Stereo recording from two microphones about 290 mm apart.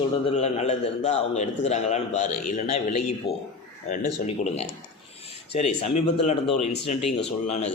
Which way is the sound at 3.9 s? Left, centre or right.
Left.